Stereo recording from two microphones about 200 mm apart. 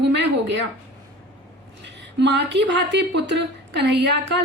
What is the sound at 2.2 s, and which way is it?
A woman's voice, 60° right (ahead or behind).